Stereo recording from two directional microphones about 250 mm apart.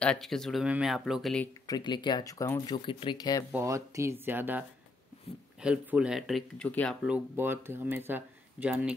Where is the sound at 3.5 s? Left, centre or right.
Centre.